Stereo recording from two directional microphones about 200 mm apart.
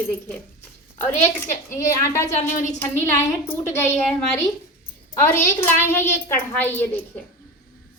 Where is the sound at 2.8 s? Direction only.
10° left (ahead or behind).